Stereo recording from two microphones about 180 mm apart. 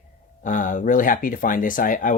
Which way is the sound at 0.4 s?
45° left (ahead or behind).